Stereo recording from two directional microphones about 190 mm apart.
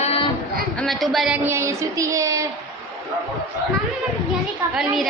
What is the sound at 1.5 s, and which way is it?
Speech, 15° right (ahead or behind).